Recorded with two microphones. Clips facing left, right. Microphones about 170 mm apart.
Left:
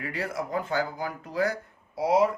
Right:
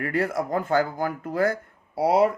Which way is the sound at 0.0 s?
50° right (ahead or behind).